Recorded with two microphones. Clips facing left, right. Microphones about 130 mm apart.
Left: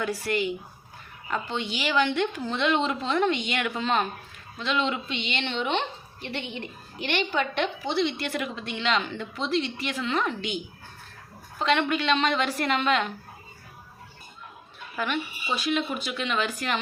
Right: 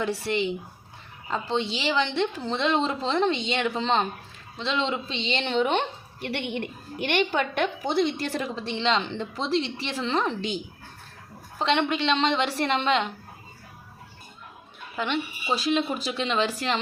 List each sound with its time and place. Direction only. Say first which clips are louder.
0.0 s a woman's voice: right 1 dB; 25° right (ahead or behind); by 5.8 s 40° right (ahead or behind)
6.1 s a woman's voice: right 5 dB; 50° right (ahead or behind); by 10.6 s 30° right (ahead or behind)
11.6 s speech: even; 25° right (ahead or behind)
14.9 s speech: right 1 dB; 25° right (ahead or behind)